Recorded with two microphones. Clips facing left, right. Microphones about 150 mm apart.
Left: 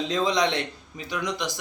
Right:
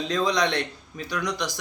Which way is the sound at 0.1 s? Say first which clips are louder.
Right 1 dB; 20° left (ahead or behind).